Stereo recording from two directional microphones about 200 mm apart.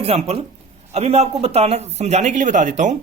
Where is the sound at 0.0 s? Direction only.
30° right (ahead or behind).